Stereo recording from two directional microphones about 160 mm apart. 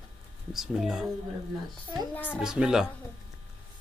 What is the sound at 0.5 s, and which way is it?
Speech, 5° right (ahead or behind).